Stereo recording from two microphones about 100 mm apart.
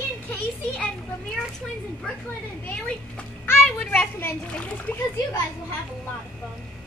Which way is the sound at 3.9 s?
20° left (ahead or behind).